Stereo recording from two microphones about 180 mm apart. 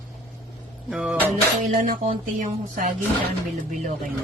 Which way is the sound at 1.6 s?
50° right (ahead or behind).